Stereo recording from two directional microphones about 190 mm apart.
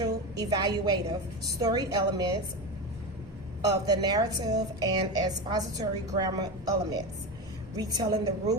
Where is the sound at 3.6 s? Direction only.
20° right (ahead or behind).